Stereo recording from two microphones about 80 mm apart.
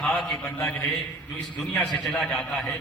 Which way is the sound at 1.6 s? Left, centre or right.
Centre.